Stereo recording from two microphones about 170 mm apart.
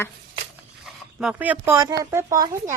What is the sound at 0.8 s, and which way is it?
Speech, 5° right (ahead or behind).